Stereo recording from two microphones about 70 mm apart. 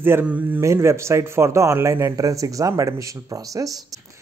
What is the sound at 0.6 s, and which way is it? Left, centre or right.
Speech, right.